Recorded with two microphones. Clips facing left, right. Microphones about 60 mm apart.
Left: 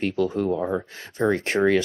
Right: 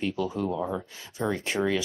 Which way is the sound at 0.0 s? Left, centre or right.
Left.